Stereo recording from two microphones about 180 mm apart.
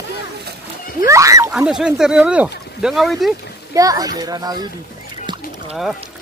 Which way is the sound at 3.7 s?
20° right (ahead or behind).